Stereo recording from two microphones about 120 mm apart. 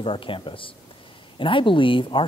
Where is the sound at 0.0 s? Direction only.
45° left (ahead or behind).